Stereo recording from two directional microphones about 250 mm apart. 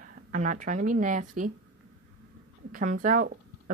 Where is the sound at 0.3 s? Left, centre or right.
Right.